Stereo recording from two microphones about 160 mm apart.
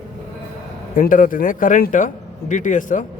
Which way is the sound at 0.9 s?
60° left (ahead or behind).